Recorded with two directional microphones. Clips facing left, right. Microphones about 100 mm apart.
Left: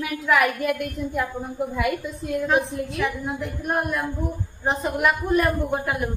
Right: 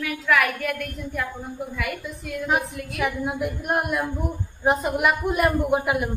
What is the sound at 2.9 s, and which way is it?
A man's voice, 10° right (ahead or behind).